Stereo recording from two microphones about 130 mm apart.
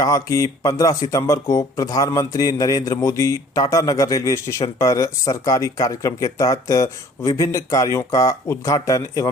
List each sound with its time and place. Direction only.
0.0 s speech: 25° left (ahead or behind)